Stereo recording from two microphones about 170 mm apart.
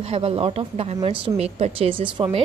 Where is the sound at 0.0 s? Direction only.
35° right (ahead or behind).